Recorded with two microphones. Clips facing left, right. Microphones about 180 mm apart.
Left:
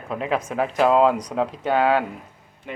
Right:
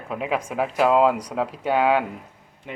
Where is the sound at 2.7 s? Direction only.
20° right (ahead or behind).